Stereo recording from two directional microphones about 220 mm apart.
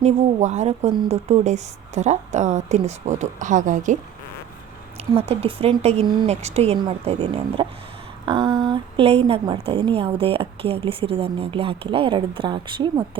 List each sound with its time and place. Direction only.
0.0 s speech: 30° right (ahead or behind)
5.3 s a woman's voice: 25° right (ahead or behind)
8.2 s a sound: 20° right (ahead or behind)
8.7 s a woman's voice: 25° right (ahead or behind)